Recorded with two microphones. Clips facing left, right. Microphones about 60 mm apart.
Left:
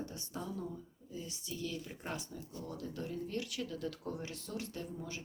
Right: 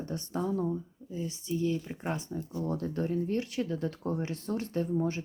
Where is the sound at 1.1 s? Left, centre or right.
Right.